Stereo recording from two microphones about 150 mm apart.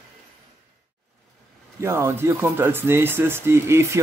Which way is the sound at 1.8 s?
15° right (ahead or behind).